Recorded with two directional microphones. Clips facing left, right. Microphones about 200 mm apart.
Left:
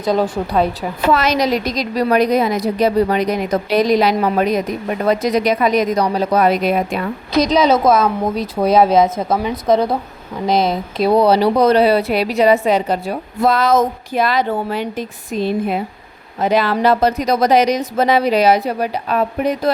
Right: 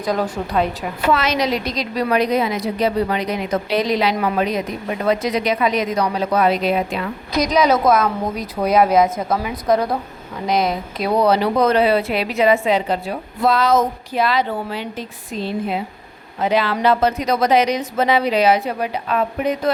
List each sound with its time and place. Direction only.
0.5 s a woman's voice: 35° left (ahead or behind)
7.3 s a woman's voice: 25° left (ahead or behind); by 15.8 s 55° left (ahead or behind)
16.4 s speech: 45° left (ahead or behind)